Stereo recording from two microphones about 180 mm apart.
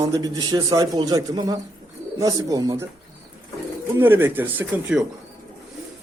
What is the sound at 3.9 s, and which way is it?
A man's voice, 10° right (ahead or behind).